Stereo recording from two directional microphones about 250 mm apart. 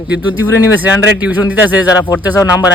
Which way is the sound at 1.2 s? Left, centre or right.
Centre.